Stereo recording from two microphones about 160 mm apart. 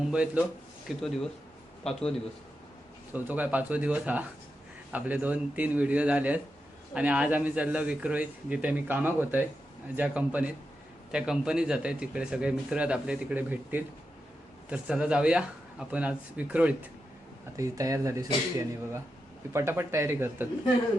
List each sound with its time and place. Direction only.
0.0 s speech: 5° right (ahead or behind)
3.1 s speech: 10° right (ahead or behind)
17.6 s speech: 20° right (ahead or behind)